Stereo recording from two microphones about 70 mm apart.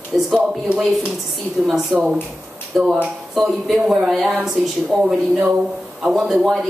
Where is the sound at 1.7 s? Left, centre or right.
Centre.